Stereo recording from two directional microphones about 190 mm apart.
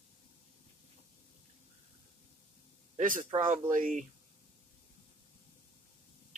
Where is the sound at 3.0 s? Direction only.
45° right (ahead or behind).